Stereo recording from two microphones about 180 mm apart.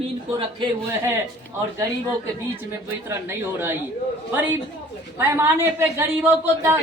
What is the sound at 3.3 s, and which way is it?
Speech, 15° right (ahead or behind).